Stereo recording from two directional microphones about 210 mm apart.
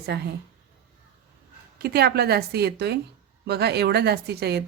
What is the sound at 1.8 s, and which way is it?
A woman's voice, 50° right (ahead or behind).